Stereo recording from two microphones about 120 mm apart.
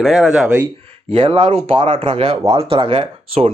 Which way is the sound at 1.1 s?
45° right (ahead or behind).